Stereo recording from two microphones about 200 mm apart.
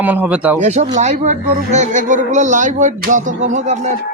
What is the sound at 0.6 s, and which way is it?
Speech, 35° right (ahead or behind).